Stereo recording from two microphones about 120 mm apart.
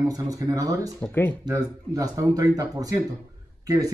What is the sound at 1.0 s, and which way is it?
Speech, 15° left (ahead or behind).